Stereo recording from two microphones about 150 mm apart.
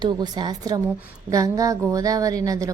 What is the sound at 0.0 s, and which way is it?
A woman's voice, 30° right (ahead or behind).